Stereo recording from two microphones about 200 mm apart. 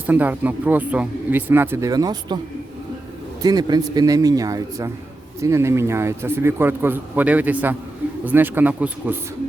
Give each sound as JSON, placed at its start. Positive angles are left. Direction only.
{"t": 0.1, "sound": "a man's voice", "side_deg": -10}
{"t": 3.4, "sound": "a man's voice", "side_deg": -20}